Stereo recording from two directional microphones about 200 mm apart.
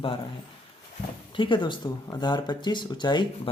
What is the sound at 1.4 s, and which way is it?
Speech, 25° left (ahead or behind).